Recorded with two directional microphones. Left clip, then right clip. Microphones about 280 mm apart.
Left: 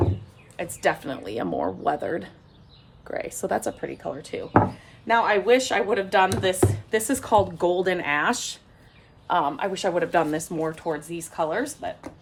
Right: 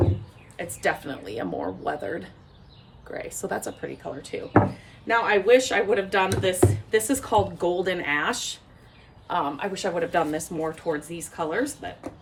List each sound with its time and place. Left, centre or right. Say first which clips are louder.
0.5 s speech: left 2 dB; left
4.5 s speech: left 1 dB; centre